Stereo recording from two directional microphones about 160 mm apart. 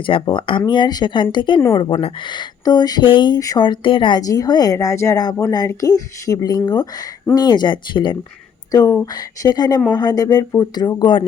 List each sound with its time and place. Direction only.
0.0 s speech: 30° left (ahead or behind)